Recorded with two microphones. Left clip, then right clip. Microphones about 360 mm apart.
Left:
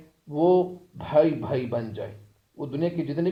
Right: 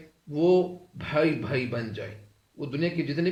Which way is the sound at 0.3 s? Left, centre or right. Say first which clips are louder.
Left 2 dB; centre.